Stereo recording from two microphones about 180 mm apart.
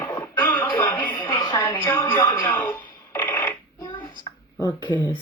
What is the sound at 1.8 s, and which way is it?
Speech, 15° left (ahead or behind).